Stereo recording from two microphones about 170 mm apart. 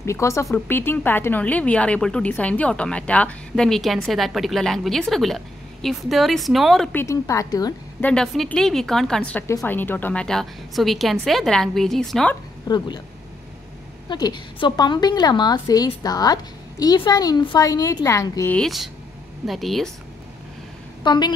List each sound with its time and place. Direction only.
0.0 s a woman's voice: 15° left (ahead or behind); by 6.9 s centre (ahead or behind)
6.9 s a woman's voice: 15° left (ahead or behind)
8.0 s a woman's voice: 5° left (ahead or behind)
12.6 s a woman's voice: 25° left (ahead or behind)
14.0 s a woman's voice: 25° left (ahead or behind)
18.5 s a woman's voice: centre (ahead or behind)
21.0 s a woman's voice: 25° left (ahead or behind)